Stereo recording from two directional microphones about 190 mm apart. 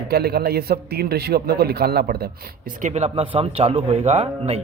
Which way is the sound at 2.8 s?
35° right (ahead or behind).